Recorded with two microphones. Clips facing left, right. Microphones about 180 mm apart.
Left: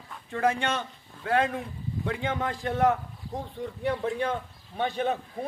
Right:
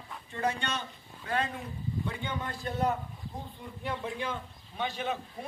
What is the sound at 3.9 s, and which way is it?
A man's voice, 60° left (ahead or behind).